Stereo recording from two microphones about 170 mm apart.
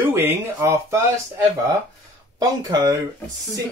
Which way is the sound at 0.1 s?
15° right (ahead or behind).